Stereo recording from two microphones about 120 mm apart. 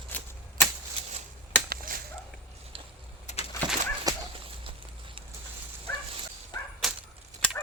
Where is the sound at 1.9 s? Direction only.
90° right.